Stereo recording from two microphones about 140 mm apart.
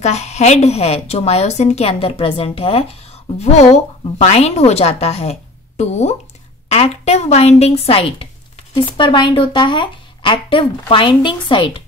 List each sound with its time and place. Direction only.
0.0 s a woman's voice: 50° left (ahead or behind); by 11.8 s 35° left (ahead or behind)